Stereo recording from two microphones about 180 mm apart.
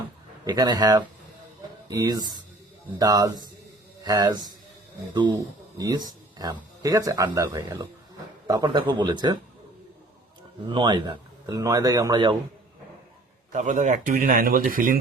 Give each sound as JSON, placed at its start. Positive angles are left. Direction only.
{"t": 0.4, "sound": "speech", "side_deg": -20}
{"t": 5.7, "sound": "speech", "side_deg": -20}
{"t": 10.7, "sound": "speech", "side_deg": -25}
{"t": 13.5, "sound": "speech", "side_deg": -45}